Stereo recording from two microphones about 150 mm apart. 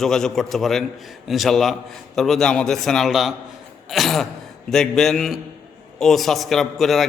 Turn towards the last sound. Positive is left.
turn(degrees=0)  # may be behind; listen again after turning